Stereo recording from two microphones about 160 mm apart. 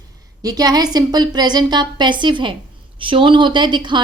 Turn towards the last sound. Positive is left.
turn(degrees=-30)  # may be behind; listen again after turning